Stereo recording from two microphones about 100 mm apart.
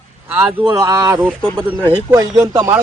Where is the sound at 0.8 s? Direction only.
35° right (ahead or behind).